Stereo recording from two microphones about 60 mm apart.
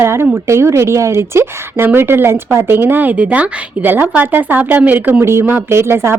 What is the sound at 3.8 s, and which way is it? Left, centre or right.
A woman's voice, right.